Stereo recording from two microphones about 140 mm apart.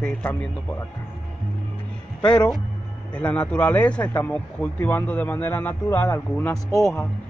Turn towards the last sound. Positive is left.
turn(degrees=15)  # may be behind; listen again after turning